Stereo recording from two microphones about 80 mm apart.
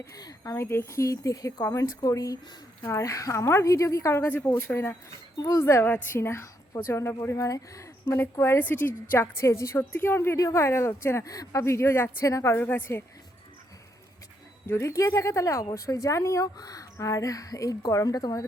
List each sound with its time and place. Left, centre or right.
0.0 s speech: left
0.5 s a woman's voice: left
4.3 s speech: left
5.4 s speech: left
5.6 s a woman's voice: left
10.3 s a woman's voice: left
12.2 s a woman's voice: left
12.5 s speech: left
14.7 s speech: left